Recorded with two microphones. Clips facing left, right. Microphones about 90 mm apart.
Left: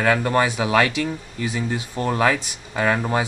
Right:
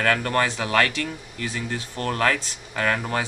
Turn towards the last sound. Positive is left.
turn(degrees=15)  # may be behind; listen again after turning